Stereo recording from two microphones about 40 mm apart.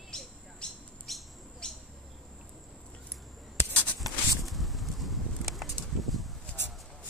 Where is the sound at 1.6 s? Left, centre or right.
Left.